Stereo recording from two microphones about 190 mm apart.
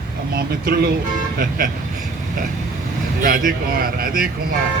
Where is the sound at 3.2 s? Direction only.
50° right (ahead or behind).